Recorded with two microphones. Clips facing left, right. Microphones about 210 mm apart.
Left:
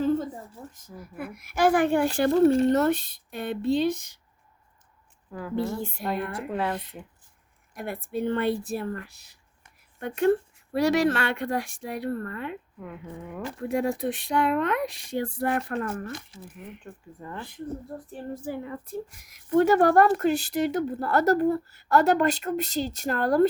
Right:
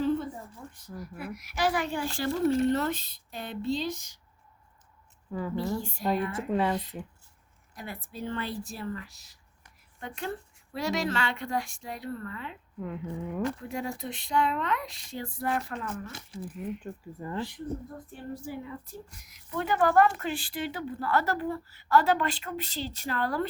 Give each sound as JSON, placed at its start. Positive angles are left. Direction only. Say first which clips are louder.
{"t": 1.1, "sound": "speech", "louder": "left 7 dB", "side_deg": 55}
{"t": 5.3, "sound": "speech", "louder": "right 1 dB", "side_deg": 0}
{"t": 5.5, "sound": "speech", "louder": "left 6 dB", "side_deg": 55}
{"t": 6.5, "sound": "speech", "louder": "right 2 dB", "side_deg": 0}
{"t": 7.8, "sound": "speech", "louder": "left 8 dB", "side_deg": 55}
{"t": 12.8, "sound": "speech", "louder": "right 8 dB", "side_deg": 5}
{"t": 13.7, "sound": "speech", "louder": "left 8 dB", "side_deg": 65}
{"t": 16.8, "sound": "speech", "louder": "right 3 dB", "side_deg": -10}
{"t": 17.9, "sound": "speech", "louder": "left 5 dB", "side_deg": 35}
{"t": 18.4, "sound": "speech", "louder": "left 5 dB", "side_deg": 55}
{"t": 19.5, "sound": "speech", "louder": "left 8 dB", "side_deg": 50}